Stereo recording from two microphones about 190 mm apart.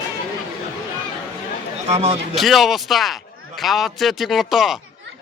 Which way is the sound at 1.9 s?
35° right (ahead or behind).